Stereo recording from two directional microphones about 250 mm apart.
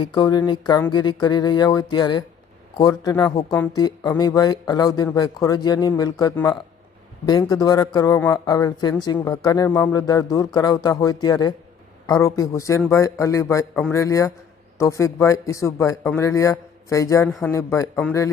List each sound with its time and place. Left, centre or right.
0.0 s speech: centre